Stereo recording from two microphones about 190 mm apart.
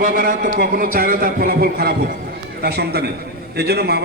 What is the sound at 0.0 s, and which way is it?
A man's voice, 45° right (ahead or behind).